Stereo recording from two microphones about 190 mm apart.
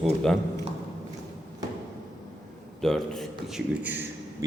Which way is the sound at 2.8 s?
Centre (ahead or behind).